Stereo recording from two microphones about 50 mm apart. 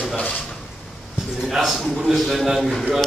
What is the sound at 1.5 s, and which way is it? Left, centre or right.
A man's voice, centre.